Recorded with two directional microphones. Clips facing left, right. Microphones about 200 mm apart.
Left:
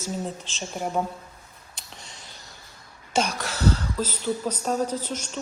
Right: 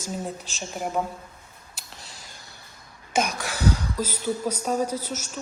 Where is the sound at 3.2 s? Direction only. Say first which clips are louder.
Left 1 dB; 10° right (ahead or behind).